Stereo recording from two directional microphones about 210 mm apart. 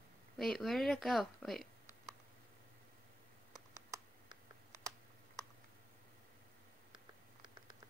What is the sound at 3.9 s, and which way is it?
Computer keyboard, 15° right (ahead or behind).